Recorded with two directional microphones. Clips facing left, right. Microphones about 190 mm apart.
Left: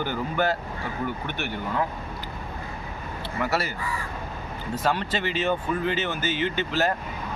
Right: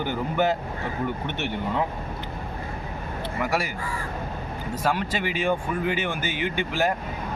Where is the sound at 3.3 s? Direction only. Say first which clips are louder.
Even; 15° right (ahead or behind).